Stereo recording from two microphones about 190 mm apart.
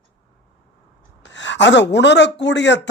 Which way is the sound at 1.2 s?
70° left (ahead or behind).